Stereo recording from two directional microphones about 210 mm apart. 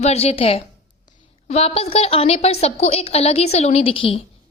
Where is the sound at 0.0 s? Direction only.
30° left (ahead or behind).